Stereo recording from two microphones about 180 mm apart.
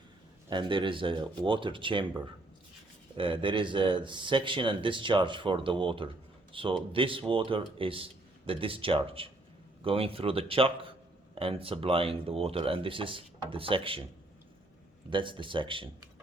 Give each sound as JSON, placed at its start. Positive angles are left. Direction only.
{"t": 0.5, "sound": "speech", "side_deg": -30}
{"t": 3.2, "sound": "speech", "side_deg": -30}
{"t": 15.1, "sound": "speech", "side_deg": -30}